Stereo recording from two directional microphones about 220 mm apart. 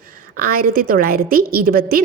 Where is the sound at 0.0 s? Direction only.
40° right (ahead or behind).